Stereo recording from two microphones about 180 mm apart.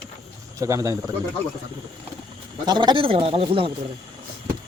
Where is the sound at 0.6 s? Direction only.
15° right (ahead or behind).